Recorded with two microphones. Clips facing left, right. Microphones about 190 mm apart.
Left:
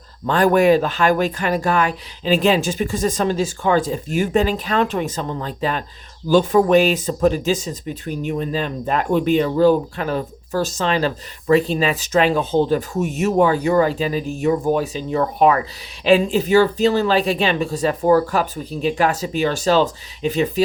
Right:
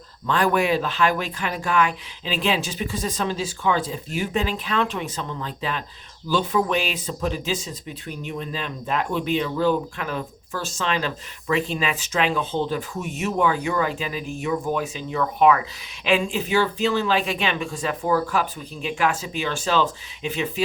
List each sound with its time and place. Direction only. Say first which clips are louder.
0.3 s speech: left 7 dB; 40° left (ahead or behind)